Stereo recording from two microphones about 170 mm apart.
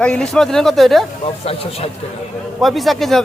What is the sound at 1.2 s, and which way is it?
Speech, 35° left (ahead or behind).